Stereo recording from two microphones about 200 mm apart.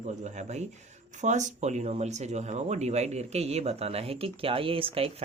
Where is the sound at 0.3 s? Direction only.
35° right (ahead or behind).